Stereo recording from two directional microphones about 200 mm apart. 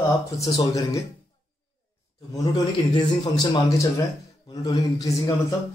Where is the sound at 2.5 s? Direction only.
20° left (ahead or behind).